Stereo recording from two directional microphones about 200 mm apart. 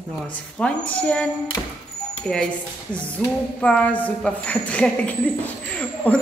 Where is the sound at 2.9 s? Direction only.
5° left (ahead or behind).